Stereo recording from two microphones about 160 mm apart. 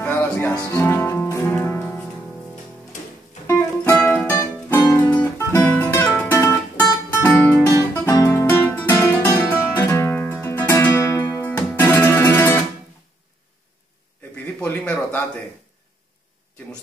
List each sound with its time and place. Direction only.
0.0 s music: 15° left (ahead or behind)
3.4 s music: 15° left (ahead or behind)
14.4 s a sound: 10° left (ahead or behind)